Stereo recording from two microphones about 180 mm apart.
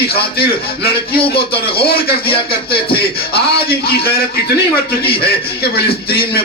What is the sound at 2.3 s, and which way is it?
Speech, 30° left (ahead or behind).